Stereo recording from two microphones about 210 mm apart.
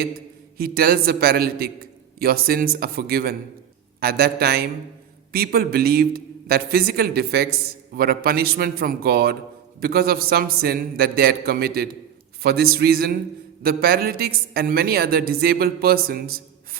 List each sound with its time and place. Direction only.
0.5 s speech: 45° right (ahead or behind)